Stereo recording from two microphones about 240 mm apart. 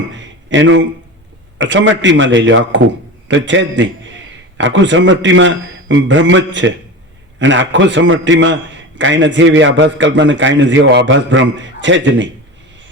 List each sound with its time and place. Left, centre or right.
0.1 s a man's voice: right